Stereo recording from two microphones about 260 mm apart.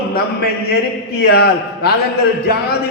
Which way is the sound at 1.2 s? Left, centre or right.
Left.